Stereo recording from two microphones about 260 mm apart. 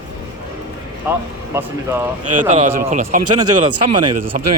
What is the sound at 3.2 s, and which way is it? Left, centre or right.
A man's voice, right.